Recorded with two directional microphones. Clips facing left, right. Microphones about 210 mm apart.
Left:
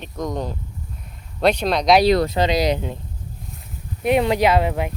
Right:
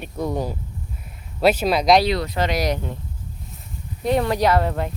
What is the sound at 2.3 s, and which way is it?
Speech, 15° left (ahead or behind).